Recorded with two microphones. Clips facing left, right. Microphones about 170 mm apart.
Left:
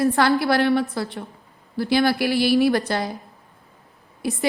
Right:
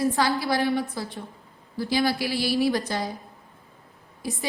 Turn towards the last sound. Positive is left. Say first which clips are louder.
# left 6 dB
turn(degrees=65)  # may be behind; listen again after turning